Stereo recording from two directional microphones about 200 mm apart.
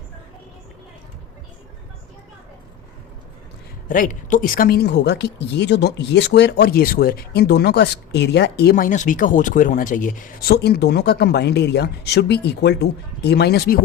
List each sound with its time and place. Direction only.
3.8 s speech: 40° left (ahead or behind)